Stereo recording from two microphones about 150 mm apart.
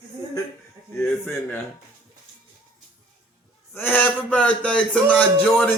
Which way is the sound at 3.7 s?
10° left (ahead or behind).